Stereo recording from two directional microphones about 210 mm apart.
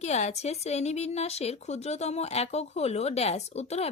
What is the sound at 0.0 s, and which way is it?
A woman's voice, 30° left (ahead or behind).